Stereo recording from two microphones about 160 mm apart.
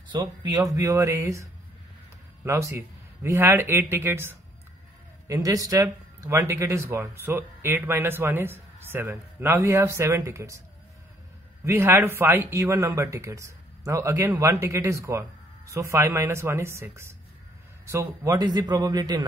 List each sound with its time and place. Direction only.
0.1 s a man's voice: 25° right (ahead or behind)
11.6 s a man's voice: 15° right (ahead or behind)